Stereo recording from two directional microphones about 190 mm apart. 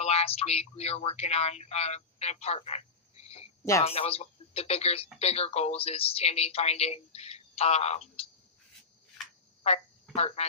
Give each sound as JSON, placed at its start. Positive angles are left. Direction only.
{"t": 0.0, "sound": "speech", "side_deg": 35}
{"t": 10.2, "sound": "speech", "side_deg": 35}